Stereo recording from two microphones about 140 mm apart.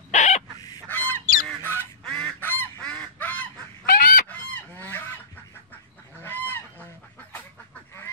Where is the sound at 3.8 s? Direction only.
90° left.